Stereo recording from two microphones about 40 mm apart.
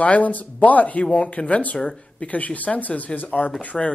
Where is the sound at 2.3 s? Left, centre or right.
Left.